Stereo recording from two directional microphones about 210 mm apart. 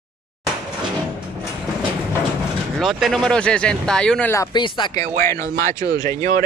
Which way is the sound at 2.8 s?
Centre (ahead or behind).